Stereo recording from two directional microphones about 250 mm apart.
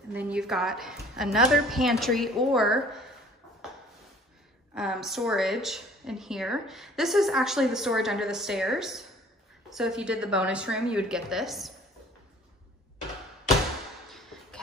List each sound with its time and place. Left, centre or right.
0.1 s a woman's voice: centre
4.7 s a woman's voice: centre